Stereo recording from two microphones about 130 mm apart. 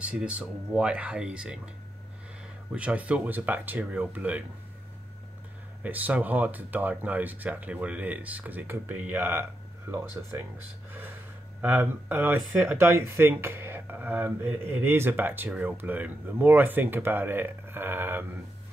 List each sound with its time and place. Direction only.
0.0 s speech: 10° right (ahead or behind)
2.7 s speech: 10° right (ahead or behind)
5.8 s speech: 15° right (ahead or behind)
11.6 s speech: 15° right (ahead or behind)